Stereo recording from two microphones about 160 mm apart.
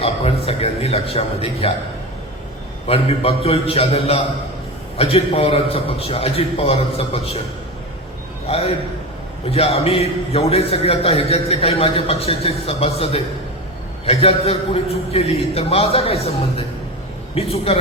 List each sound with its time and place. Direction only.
0.0 s a man's voice: 40° left (ahead or behind)
2.8 s a man's voice: 40° left (ahead or behind)
8.4 s a man's voice: 40° left (ahead or behind)